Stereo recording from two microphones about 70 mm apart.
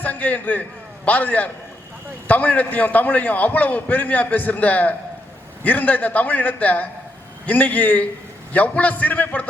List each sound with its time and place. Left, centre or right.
0.0 s a man's voice: left